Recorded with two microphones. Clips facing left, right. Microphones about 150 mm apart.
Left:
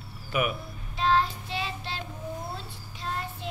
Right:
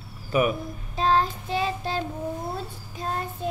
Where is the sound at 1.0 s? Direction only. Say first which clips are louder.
Right 2 dB; 45° right (ahead or behind).